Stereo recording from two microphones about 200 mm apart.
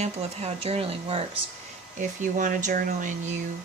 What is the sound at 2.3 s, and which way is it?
Speech, 40° right (ahead or behind).